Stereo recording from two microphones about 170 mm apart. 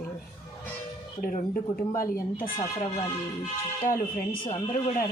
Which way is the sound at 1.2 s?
55° left (ahead or behind).